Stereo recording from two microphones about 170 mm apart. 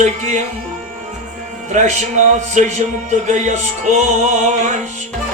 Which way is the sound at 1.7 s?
45° right (ahead or behind).